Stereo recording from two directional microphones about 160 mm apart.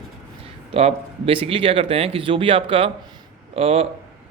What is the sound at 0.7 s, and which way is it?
Speech, 40° right (ahead or behind).